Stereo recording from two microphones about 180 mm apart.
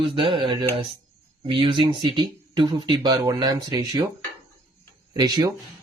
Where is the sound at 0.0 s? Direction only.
30° right (ahead or behind).